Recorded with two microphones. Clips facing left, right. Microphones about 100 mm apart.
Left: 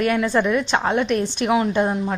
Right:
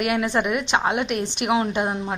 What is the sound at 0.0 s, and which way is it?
A woman's voice, 20° right (ahead or behind).